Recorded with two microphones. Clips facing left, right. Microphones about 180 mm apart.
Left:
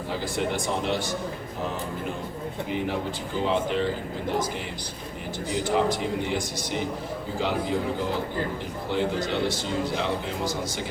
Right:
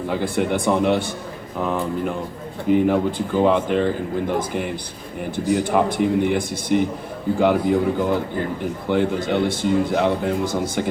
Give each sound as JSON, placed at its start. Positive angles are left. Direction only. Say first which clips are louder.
{"t": 0.1, "sound": "speech", "louder": "right 6 dB", "side_deg": -55}
{"t": 2.6, "sound": "speech", "louder": "right 13 dB", "side_deg": -55}